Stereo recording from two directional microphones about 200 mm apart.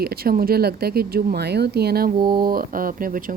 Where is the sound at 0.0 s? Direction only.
50° right (ahead or behind).